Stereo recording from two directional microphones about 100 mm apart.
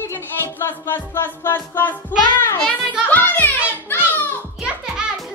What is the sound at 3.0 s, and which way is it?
Music, 20° left (ahead or behind).